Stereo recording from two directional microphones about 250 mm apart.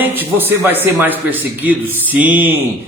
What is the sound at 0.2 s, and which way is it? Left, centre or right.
A man's voice, centre.